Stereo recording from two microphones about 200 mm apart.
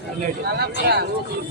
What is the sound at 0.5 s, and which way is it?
Speech, 55° right (ahead or behind).